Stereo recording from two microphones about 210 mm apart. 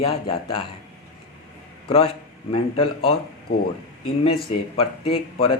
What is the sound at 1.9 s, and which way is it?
Speech, 25° left (ahead or behind).